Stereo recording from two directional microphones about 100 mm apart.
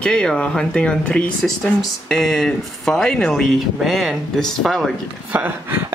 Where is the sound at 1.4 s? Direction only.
Centre (ahead or behind).